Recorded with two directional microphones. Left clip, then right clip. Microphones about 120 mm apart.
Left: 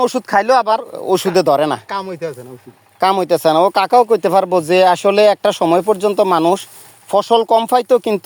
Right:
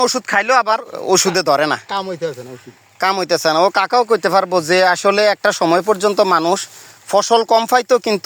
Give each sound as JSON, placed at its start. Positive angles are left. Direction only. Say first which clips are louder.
{"t": 0.3, "sound": "speech", "louder": "left 2 dB", "side_deg": 35}
{"t": 0.8, "sound": "speech", "louder": "right 1 dB", "side_deg": 20}
{"t": 2.0, "sound": "speech", "louder": "right 1 dB", "side_deg": 0}
{"t": 3.0, "sound": "speech", "louder": "left 3 dB", "side_deg": 20}